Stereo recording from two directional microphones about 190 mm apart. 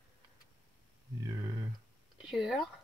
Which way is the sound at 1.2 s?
15° right (ahead or behind).